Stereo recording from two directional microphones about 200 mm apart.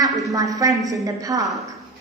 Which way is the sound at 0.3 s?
15° right (ahead or behind).